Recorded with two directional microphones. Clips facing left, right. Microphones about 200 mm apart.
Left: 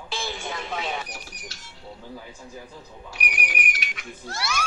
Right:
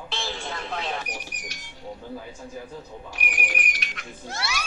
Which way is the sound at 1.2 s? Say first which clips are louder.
Right 3 dB; 15° right (ahead or behind).